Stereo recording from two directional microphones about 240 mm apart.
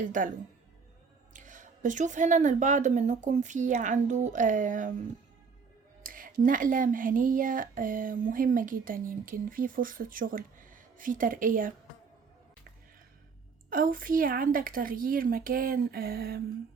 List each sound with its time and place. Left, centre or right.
0.0 s speech: right
1.3 s speech: right
6.1 s speech: right
13.7 s speech: right